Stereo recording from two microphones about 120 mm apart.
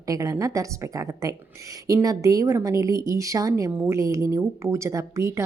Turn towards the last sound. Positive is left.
turn(degrees=-25)  # may be behind; listen again after turning